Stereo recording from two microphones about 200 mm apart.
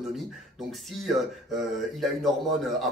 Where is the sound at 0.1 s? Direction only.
Centre (ahead or behind).